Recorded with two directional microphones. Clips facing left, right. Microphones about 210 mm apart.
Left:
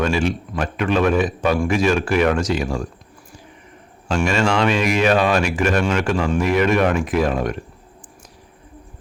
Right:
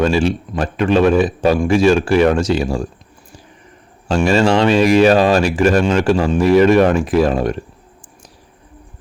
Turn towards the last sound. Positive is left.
turn(degrees=-30)  # may be behind; listen again after turning